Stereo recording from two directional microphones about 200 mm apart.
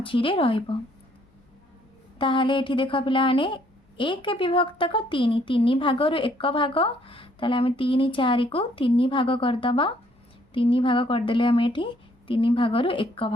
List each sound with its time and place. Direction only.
0.0 s speech: 25° left (ahead or behind)
2.1 s speech: 25° left (ahead or behind)